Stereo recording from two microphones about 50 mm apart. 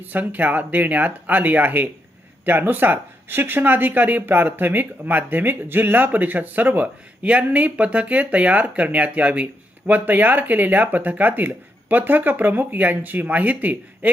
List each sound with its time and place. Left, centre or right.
0.0 s speech: right